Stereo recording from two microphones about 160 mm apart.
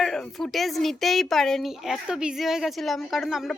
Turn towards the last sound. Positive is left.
turn(degrees=0)  # may be behind; listen again after turning